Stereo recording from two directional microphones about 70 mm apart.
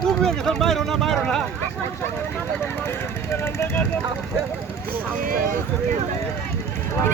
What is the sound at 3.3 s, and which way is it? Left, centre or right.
Speech, left.